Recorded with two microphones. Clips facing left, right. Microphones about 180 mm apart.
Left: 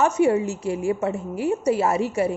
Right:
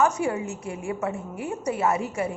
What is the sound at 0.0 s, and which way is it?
A woman's voice, 25° left (ahead or behind).